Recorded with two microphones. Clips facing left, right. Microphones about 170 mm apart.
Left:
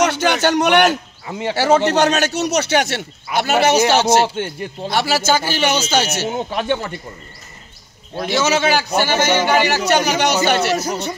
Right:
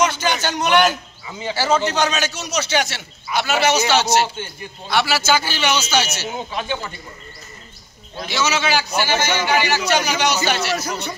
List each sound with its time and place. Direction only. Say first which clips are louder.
0.0 s a man's voice: left 4 dB; 65° left (ahead or behind)
8.2 s a man's voice: left 5 dB; 50° left (ahead or behind)